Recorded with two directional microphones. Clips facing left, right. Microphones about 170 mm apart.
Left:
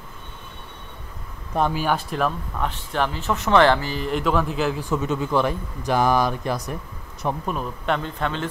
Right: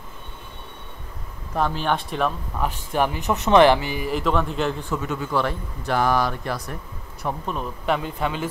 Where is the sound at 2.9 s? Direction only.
15° right (ahead or behind).